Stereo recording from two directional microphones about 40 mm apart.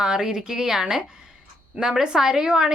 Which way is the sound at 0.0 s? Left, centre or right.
Centre.